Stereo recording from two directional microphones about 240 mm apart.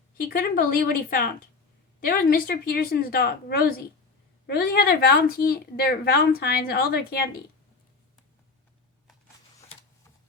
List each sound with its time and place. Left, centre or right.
0.2 s a woman's voice: left